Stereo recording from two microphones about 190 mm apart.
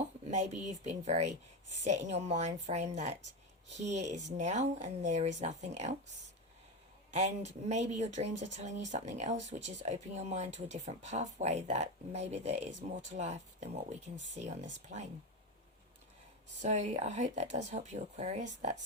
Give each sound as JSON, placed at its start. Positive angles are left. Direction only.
{"t": 0.3, "sound": "speech", "side_deg": -35}
{"t": 7.1, "sound": "speech", "side_deg": -35}
{"t": 16.6, "sound": "speech", "side_deg": -35}